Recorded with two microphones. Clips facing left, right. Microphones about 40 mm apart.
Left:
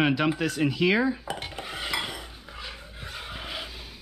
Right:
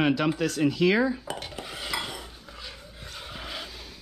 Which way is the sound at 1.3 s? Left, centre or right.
Centre.